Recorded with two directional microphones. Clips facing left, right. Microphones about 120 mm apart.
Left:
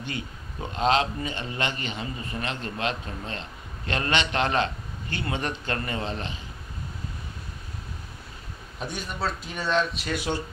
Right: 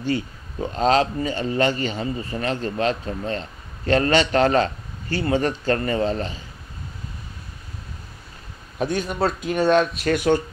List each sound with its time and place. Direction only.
0.0 s a man's voice: 35° right (ahead or behind)
9.2 s speech: 60° right (ahead or behind)